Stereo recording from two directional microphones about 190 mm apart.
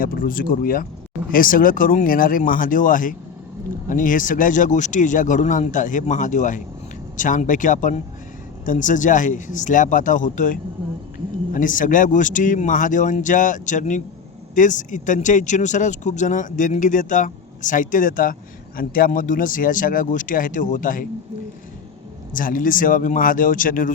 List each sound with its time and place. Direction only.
0.0 s speech: 50° left (ahead or behind)
22.3 s speech: 45° left (ahead or behind)